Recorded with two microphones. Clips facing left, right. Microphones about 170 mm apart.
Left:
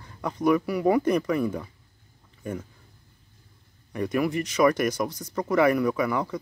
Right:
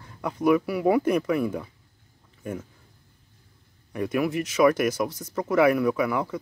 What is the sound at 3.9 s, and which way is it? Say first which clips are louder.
Speech: even; 5° right (ahead or behind).